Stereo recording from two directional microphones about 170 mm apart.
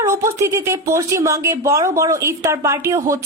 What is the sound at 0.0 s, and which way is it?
Speech, 15° right (ahead or behind).